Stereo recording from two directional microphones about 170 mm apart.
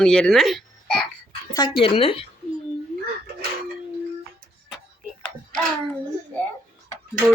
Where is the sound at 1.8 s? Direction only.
35° left (ahead or behind).